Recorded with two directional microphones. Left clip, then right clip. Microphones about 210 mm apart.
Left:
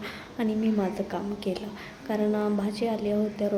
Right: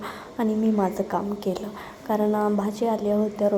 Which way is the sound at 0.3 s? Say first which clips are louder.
Right 4 dB; 10° right (ahead or behind).